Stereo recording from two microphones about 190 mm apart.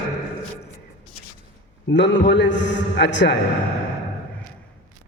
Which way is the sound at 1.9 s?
70° left (ahead or behind).